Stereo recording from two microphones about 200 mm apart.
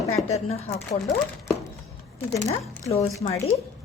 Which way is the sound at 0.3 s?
35° left (ahead or behind).